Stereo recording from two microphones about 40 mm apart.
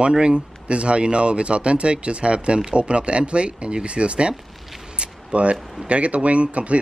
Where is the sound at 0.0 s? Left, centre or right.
Right.